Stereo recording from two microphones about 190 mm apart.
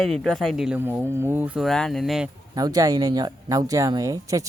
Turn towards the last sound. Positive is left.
turn(degrees=-15)  # may be behind; listen again after turning